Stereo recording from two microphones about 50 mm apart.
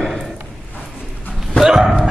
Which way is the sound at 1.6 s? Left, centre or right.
Centre.